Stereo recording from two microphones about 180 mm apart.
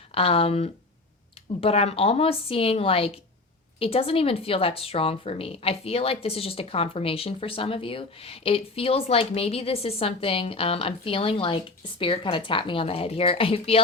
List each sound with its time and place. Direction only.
0.1 s speech: 30° left (ahead or behind)